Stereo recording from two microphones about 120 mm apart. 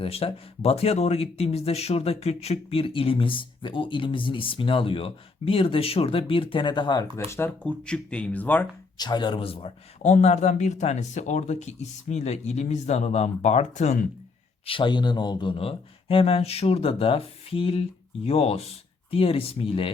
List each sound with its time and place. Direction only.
0.0 s speech: 55° left (ahead or behind); by 7.0 s 40° left (ahead or behind)
7.3 s speech: 20° left (ahead or behind)
7.9 s speech: 10° left (ahead or behind)
9.0 s speech: 35° left (ahead or behind)
10.0 s speech: 75° left (ahead or behind)
14.7 s speech: 40° left (ahead or behind)